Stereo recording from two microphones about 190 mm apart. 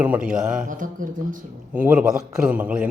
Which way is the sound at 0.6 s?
45° right (ahead or behind).